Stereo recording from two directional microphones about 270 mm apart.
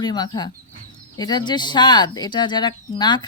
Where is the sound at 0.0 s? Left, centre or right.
Centre.